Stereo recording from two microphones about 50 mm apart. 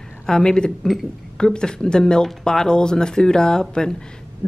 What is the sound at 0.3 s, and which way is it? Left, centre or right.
Speech, centre.